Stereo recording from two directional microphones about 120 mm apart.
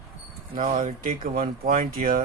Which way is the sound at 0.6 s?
90° right.